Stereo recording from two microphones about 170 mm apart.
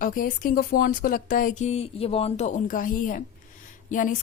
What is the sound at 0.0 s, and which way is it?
A woman's voice, 55° left (ahead or behind).